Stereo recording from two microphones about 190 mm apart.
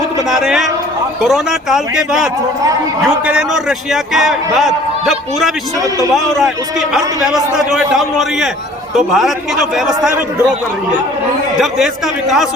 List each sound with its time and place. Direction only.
0.3 s a man's voice: centre (ahead or behind)